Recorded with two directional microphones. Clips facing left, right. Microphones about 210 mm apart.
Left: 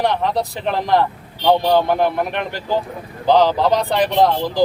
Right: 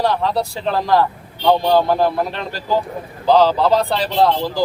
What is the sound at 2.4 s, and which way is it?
Speech, 20° left (ahead or behind).